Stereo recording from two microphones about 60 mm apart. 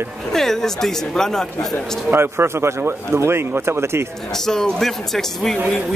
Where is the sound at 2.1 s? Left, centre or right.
Right.